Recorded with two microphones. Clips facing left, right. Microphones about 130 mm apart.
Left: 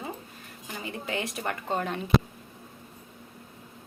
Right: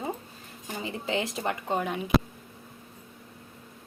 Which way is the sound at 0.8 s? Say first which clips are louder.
Right 3 dB; 25° right (ahead or behind).